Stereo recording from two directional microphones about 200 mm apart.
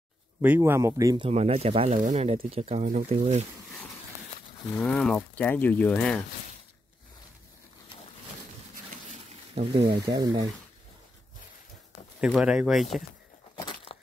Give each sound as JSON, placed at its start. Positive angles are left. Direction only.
{"t": 0.4, "sound": "speech", "side_deg": -10}
{"t": 1.2, "sound": "speech", "side_deg": -30}
{"t": 4.7, "sound": "speech", "side_deg": 5}
{"t": 9.8, "sound": "speech", "side_deg": -20}
{"t": 12.2, "sound": "speech", "side_deg": -5}
{"t": 13.9, "sound": "a sound", "side_deg": 30}